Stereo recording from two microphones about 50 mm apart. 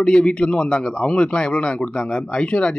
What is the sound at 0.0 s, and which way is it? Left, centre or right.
Speech, left.